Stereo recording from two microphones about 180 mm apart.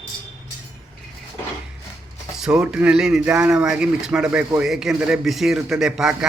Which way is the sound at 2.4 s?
5° right (ahead or behind).